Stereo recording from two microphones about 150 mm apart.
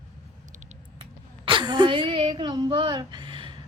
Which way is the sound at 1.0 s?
35° right (ahead or behind).